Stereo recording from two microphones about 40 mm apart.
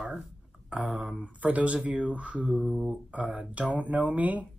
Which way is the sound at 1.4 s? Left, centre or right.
Right.